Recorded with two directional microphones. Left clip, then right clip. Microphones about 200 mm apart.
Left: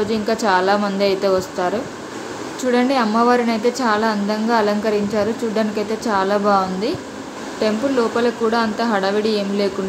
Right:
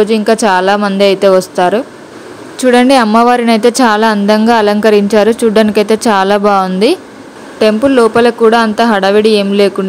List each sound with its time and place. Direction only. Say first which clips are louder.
0.0 s a woman's voice: right 10 dB; 45° right (ahead or behind)